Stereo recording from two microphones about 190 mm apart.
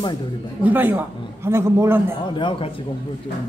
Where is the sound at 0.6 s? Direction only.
10° right (ahead or behind).